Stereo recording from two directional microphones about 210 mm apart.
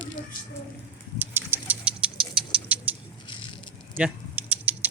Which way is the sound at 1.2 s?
10° right (ahead or behind).